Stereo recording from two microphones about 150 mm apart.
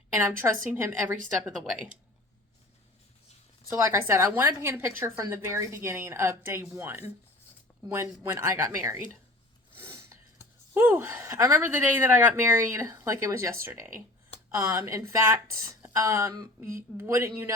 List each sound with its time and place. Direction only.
0.1 s a woman's voice: 15° right (ahead or behind)
3.7 s a woman's voice: 15° right (ahead or behind)
9.7 s a sound: 15° right (ahead or behind)
10.8 s a woman's voice: 15° right (ahead or behind)